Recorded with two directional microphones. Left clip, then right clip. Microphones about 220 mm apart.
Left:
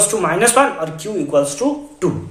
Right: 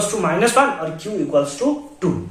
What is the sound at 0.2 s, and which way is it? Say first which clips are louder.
A man's voice: left 1 dB; 40° left (ahead or behind).